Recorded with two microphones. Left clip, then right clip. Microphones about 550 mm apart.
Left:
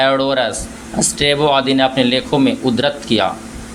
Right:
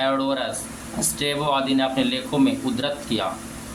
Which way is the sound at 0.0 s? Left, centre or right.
Right.